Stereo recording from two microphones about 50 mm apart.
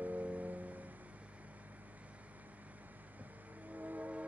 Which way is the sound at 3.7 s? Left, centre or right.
Right.